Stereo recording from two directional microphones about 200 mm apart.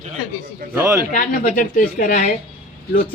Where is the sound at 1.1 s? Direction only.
40° left (ahead or behind).